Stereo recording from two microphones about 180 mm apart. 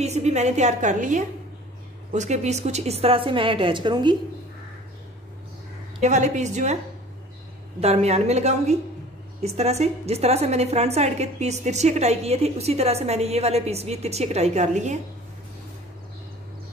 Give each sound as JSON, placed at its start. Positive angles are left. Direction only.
{"t": 0.0, "sound": "a woman's voice", "side_deg": -40}
{"t": 5.9, "sound": "a woman's voice", "side_deg": -40}
{"t": 7.8, "sound": "a woman's voice", "side_deg": -35}